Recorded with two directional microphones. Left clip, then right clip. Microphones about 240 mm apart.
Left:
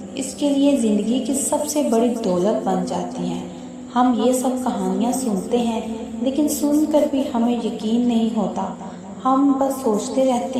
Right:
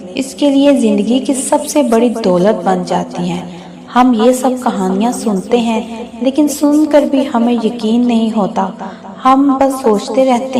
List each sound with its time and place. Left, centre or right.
0.2 s a woman's voice: right
9.8 s a woman's voice: right